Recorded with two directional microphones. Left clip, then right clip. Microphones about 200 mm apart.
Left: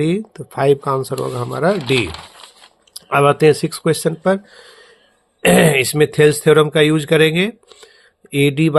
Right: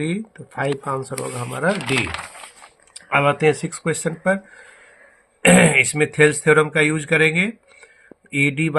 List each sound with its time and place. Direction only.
0.0 s speech: 50° left (ahead or behind)
3.1 s speech: 45° left (ahead or behind)